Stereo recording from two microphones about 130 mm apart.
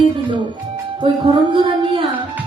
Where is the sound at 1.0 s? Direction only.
40° right (ahead or behind).